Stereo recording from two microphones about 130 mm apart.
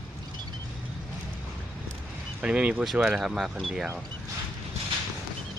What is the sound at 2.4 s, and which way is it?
Speech, 10° right (ahead or behind).